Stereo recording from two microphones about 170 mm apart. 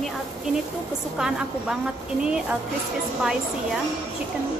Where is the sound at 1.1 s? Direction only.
5° right (ahead or behind).